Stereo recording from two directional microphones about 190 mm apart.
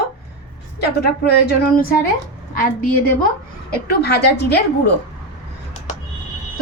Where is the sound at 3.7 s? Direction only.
60° left (ahead or behind).